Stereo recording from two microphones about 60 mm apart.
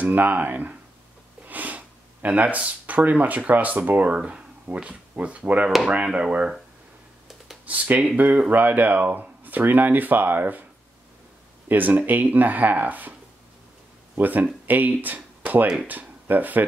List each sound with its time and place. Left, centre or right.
0.0 s speech: right
1.5 s a sound: right
2.2 s speech: right
7.6 s speech: right
11.7 s speech: right
14.1 s speech: right